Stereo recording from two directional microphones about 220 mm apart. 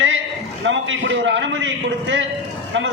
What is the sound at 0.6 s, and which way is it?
A man's voice, 60° right (ahead or behind).